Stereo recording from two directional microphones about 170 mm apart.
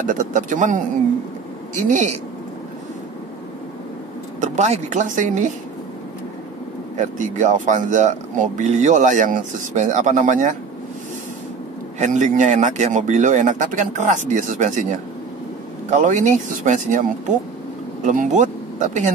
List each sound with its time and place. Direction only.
0.1 s speech: 50° right (ahead or behind)
1.9 s speech: 40° right (ahead or behind)
4.4 s speech: 40° right (ahead or behind)
7.0 s speech: 45° right (ahead or behind)
12.0 s speech: 45° right (ahead or behind)
18.0 s speech: 45° right (ahead or behind)